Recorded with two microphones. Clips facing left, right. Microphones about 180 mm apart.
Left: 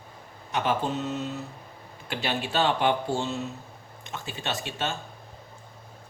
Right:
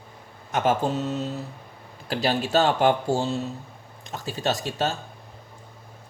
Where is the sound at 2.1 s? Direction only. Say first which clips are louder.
Right 6 dB; 40° right (ahead or behind).